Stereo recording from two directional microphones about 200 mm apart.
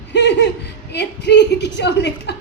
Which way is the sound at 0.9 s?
60° left (ahead or behind).